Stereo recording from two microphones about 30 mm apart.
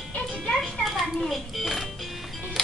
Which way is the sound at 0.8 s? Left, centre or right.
Centre.